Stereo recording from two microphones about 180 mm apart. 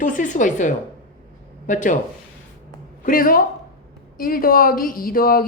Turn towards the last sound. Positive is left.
turn(degrees=55)  # may be behind; listen again after turning